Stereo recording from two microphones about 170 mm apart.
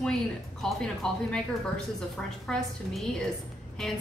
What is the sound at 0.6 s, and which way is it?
Speech, centre (ahead or behind).